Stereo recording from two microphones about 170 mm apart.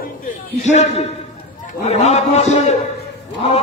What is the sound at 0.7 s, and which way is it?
A man's voice, 40° left (ahead or behind).